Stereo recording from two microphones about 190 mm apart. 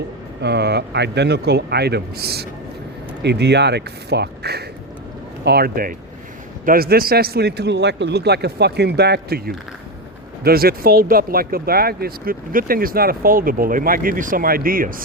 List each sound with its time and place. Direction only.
0.4 s a man's voice: 60° right (ahead or behind)